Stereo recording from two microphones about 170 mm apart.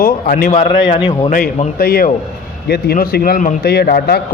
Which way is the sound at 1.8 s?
60° left (ahead or behind).